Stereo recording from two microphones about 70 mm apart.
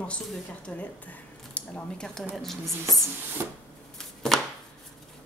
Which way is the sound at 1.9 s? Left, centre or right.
Centre.